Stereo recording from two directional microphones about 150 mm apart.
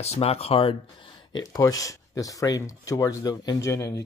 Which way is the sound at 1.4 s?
20° left (ahead or behind).